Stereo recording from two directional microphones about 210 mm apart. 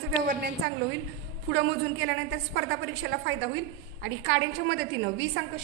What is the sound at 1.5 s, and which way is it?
A woman's voice, 65° right (ahead or behind).